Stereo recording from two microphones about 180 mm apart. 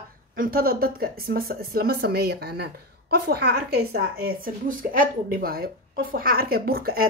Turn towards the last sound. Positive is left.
turn(degrees=-55)  # may be behind; listen again after turning